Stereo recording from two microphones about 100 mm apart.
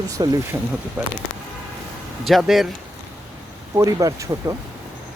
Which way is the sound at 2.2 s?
Centre (ahead or behind).